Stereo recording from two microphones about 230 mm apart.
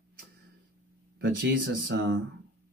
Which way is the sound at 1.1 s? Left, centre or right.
Right.